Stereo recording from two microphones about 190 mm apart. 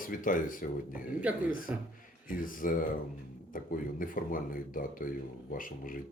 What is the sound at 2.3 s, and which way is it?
Speech, 45° left (ahead or behind).